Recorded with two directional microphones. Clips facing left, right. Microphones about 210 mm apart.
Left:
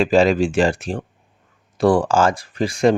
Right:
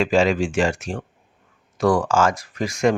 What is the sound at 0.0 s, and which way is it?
Speech, 35° left (ahead or behind).